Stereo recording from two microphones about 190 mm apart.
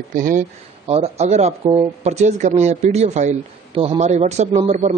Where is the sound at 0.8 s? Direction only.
30° right (ahead or behind).